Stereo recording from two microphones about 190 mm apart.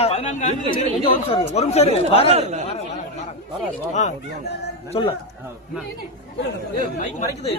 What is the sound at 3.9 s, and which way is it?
Speech, 40° left (ahead or behind).